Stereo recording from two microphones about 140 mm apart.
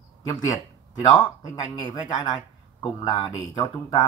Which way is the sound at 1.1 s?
30° left (ahead or behind).